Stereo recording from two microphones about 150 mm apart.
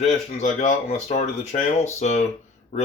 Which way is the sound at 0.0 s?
50° left (ahead or behind).